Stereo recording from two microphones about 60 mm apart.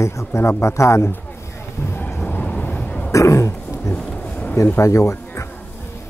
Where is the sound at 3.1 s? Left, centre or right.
Left.